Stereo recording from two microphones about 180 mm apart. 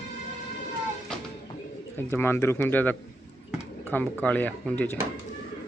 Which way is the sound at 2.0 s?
10° left (ahead or behind).